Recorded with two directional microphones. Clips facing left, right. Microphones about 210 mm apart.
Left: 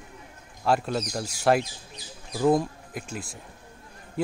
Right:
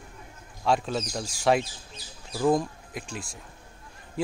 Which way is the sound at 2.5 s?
5° left (ahead or behind).